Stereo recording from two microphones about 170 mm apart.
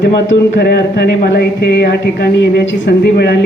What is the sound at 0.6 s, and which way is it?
A woman's voice, 75° left (ahead or behind).